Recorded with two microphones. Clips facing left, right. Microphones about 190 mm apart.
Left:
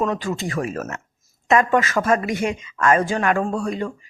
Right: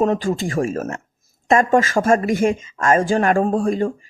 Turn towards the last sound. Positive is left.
turn(degrees=-50)  # may be behind; listen again after turning